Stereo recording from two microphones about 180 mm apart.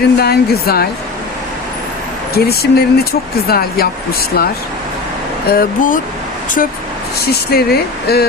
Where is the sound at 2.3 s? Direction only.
60° left (ahead or behind).